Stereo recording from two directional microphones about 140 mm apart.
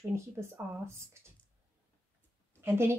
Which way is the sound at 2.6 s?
20° right (ahead or behind).